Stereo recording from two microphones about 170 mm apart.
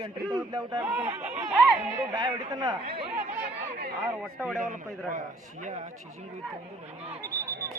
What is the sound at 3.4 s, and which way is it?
Chatter, 75° right (ahead or behind).